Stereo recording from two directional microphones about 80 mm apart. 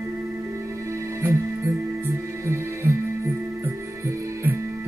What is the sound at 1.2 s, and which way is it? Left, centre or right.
Music, right.